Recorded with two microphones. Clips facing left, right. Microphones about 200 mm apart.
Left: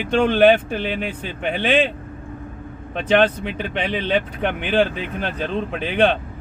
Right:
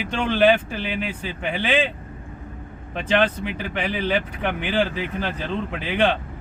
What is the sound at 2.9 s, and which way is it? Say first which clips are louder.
Speech: left 4 dB; 20° left (ahead or behind).